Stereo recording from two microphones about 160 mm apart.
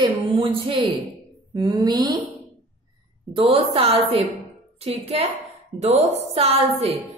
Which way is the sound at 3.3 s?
35° right (ahead or behind).